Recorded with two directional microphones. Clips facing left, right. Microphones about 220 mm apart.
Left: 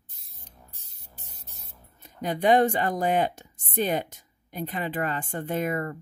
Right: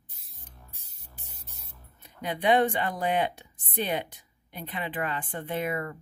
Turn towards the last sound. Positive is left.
turn(degrees=40)  # may be behind; listen again after turning